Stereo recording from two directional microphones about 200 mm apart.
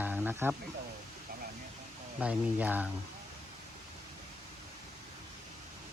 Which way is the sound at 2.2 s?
5° right (ahead or behind).